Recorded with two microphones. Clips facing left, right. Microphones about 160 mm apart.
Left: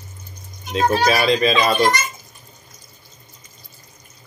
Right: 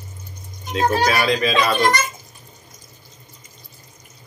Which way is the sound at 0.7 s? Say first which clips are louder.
Left 1 dB; 25° left (ahead or behind).